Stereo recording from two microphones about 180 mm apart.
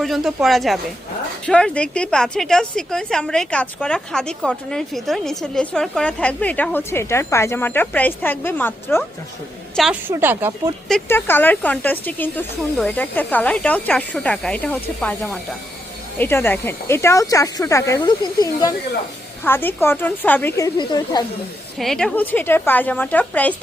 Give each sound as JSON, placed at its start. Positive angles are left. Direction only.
{"t": 0.0, "sound": "a woman's voice", "side_deg": 0}
{"t": 9.7, "sound": "a woman's voice", "side_deg": 0}
{"t": 10.1, "sound": "speech", "side_deg": -10}
{"t": 11.1, "sound": "speech", "side_deg": 10}
{"t": 20.7, "sound": "speech", "side_deg": 25}
{"t": 21.8, "sound": "speech", "side_deg": 5}